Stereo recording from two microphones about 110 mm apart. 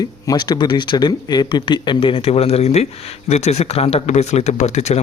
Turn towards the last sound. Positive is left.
turn(degrees=90)